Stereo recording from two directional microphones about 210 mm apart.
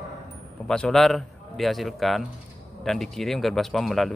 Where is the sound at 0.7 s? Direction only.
Centre (ahead or behind).